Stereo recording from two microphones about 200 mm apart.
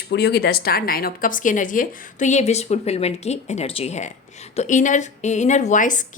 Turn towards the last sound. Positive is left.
turn(degrees=40)  # may be behind; listen again after turning